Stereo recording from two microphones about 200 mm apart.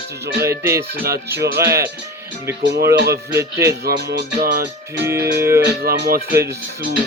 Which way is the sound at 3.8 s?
50° right (ahead or behind).